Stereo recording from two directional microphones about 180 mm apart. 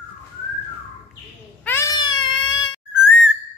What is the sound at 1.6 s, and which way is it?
Cat, 15° left (ahead or behind).